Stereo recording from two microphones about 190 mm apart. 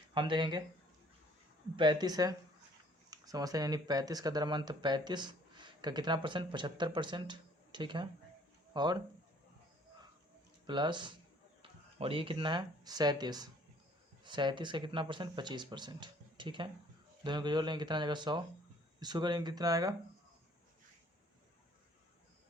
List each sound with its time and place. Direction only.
0.1 s speech: 25° right (ahead or behind)
1.7 s speech: 25° right (ahead or behind)
10.7 s speech: 25° right (ahead or behind)